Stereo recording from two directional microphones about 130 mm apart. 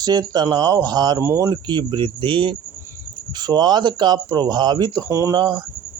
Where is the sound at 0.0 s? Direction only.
30° right (ahead or behind).